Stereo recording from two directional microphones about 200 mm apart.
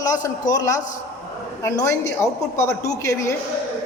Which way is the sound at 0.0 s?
20° left (ahead or behind).